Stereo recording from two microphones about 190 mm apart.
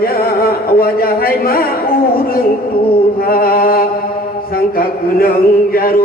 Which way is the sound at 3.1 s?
50° left (ahead or behind).